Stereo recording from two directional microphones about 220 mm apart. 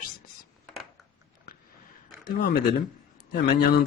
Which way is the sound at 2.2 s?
45° left (ahead or behind).